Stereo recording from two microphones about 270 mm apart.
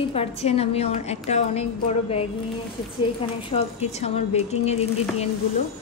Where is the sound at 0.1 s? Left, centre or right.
Left.